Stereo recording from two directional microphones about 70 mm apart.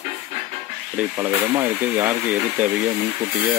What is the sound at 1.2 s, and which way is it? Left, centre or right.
Speech, right.